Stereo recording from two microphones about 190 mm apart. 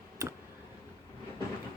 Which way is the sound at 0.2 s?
20° right (ahead or behind).